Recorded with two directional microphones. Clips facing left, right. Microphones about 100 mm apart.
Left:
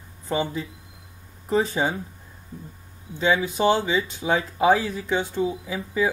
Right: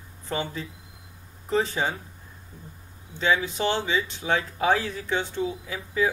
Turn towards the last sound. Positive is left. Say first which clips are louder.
# left 2 dB
turn(degrees=25)  # may be behind; listen again after turning